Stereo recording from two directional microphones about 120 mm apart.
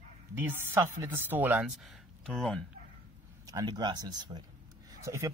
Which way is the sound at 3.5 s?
35° right (ahead or behind).